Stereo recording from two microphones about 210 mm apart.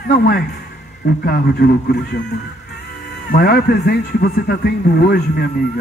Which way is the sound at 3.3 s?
45° left (ahead or behind).